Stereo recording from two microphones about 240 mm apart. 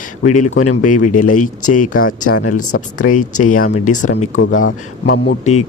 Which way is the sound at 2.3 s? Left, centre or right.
Left.